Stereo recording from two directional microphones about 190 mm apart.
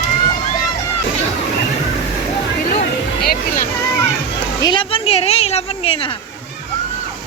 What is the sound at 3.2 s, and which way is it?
Music, 50° left (ahead or behind).